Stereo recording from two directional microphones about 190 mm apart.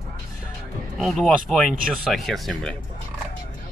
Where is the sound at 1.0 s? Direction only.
Centre (ahead or behind).